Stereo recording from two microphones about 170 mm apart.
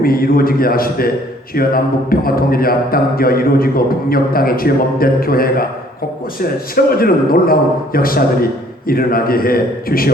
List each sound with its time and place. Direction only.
0.0 s speech: 60° left (ahead or behind)
6.7 s speech: 60° left (ahead or behind)